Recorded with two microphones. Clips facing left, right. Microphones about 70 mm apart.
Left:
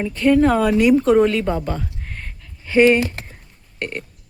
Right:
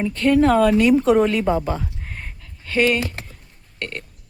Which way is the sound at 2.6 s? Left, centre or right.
Left.